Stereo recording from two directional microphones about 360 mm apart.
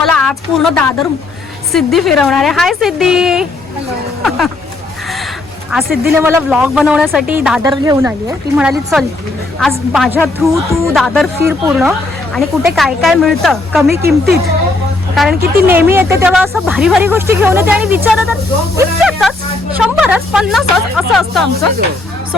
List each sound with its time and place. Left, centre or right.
0.0 s a sound: centre
1.7 s speech: centre
5.9 s speech: right
6.2 s speech: centre
14.0 s speech: right
15.1 s speech: centre